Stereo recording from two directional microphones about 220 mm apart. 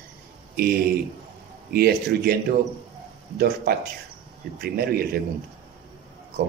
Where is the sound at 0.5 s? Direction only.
45° right (ahead or behind).